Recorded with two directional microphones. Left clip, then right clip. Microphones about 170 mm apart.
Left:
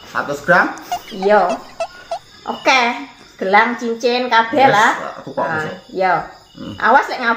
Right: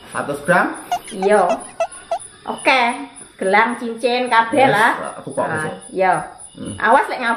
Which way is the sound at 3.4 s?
10° left (ahead or behind).